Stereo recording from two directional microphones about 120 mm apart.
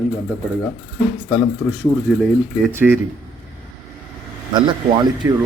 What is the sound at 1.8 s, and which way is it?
Speech, 10° left (ahead or behind).